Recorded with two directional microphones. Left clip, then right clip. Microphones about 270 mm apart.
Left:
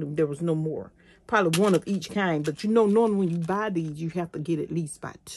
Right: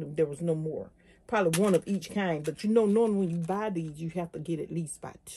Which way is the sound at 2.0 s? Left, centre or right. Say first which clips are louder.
Left 5 dB; left.